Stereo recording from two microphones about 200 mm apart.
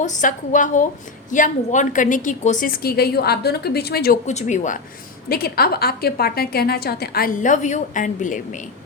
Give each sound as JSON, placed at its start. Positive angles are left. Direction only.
{"t": 0.0, "sound": "a woman's voice", "side_deg": 40}
{"t": 4.3, "sound": "a woman's voice", "side_deg": 35}
{"t": 5.3, "sound": "a woman's voice", "side_deg": 50}